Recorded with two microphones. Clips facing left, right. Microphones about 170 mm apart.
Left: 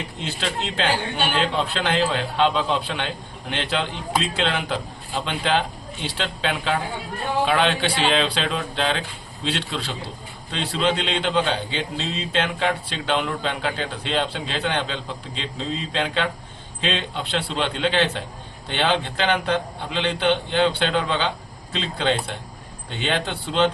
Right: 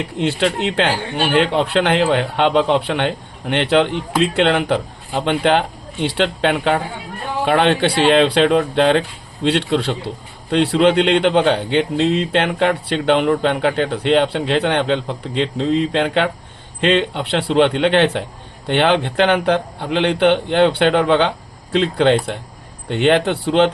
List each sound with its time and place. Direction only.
0.2 s speech: 70° right (ahead or behind)